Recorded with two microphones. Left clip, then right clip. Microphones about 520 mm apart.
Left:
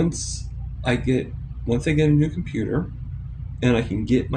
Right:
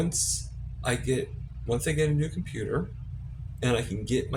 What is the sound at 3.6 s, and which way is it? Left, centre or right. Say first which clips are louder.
Speech: left 6 dB; right.